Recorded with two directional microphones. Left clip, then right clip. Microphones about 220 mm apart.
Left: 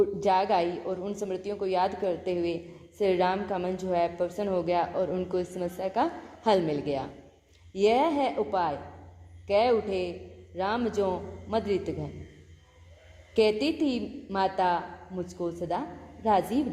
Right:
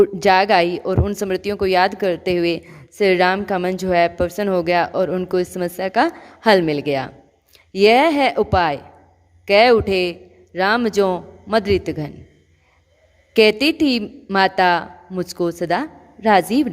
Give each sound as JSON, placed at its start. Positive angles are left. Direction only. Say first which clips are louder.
{"t": 0.0, "sound": "speech", "louder": "right 10 dB", "side_deg": -40}
{"t": 13.3, "sound": "speech", "louder": "right 10 dB", "side_deg": -40}